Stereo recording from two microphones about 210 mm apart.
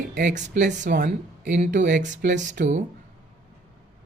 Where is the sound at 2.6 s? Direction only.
35° right (ahead or behind).